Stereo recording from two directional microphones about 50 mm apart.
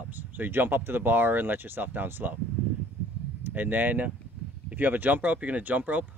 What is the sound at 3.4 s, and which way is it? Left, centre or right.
Speech, right.